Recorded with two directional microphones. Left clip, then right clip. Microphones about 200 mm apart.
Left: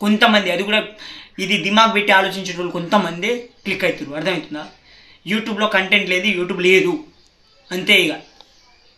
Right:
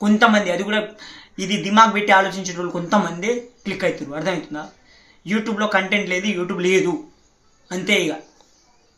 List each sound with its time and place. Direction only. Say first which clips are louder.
0.0 s speech: left 1 dB; 15° right (ahead or behind)